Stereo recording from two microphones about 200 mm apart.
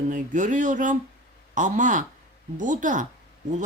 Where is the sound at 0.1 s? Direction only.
40° right (ahead or behind).